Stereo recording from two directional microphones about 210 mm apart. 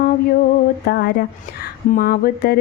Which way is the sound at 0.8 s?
50° left (ahead or behind).